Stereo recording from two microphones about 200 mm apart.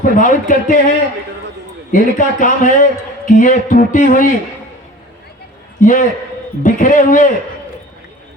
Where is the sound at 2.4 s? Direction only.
40° left (ahead or behind).